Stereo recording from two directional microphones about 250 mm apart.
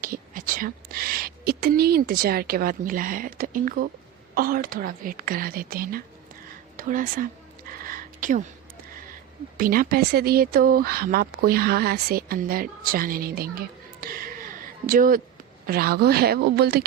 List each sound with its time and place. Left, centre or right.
0.0 s a woman's voice: right
7.7 s a sound: right
9.6 s speech: right